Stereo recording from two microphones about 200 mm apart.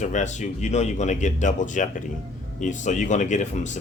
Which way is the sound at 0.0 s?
35° left (ahead or behind).